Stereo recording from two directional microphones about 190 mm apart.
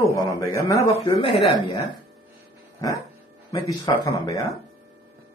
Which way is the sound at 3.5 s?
20° left (ahead or behind).